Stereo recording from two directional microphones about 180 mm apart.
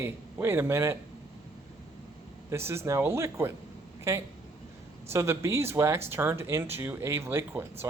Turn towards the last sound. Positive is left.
turn(degrees=-15)  # may be behind; listen again after turning